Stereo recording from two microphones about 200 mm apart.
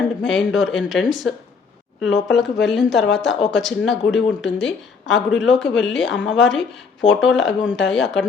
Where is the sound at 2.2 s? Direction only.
60° left (ahead or behind).